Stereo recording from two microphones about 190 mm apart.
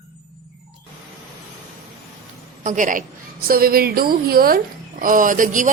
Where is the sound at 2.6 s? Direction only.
45° right (ahead or behind).